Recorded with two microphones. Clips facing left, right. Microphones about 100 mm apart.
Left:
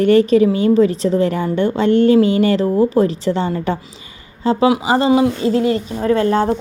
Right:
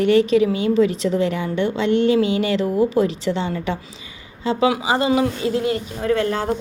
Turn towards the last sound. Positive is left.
turn(degrees=35)  # may be behind; listen again after turning